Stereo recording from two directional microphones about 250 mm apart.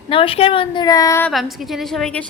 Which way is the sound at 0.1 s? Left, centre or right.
Left.